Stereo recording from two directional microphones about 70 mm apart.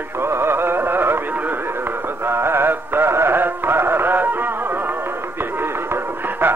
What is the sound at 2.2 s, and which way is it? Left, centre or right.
Music, right.